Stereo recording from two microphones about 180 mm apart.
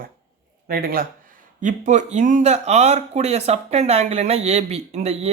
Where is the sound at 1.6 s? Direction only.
45° right (ahead or behind).